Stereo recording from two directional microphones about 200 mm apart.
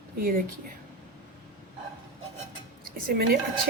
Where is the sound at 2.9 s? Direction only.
50° right (ahead or behind).